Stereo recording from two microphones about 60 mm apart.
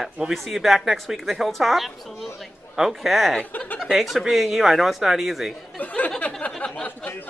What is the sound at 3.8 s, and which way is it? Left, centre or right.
Speech, centre.